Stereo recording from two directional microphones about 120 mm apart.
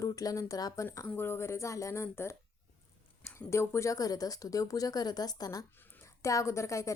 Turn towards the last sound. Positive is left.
turn(degrees=25)  # may be behind; listen again after turning